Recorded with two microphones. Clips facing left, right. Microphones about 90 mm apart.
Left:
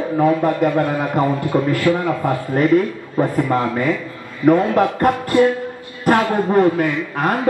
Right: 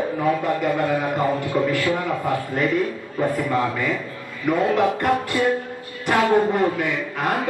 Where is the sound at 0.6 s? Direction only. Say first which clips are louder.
Left 4 dB; 45° left (ahead or behind).